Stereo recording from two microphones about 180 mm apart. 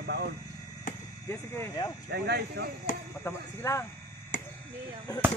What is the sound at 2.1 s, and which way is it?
Speech, 65° right (ahead or behind).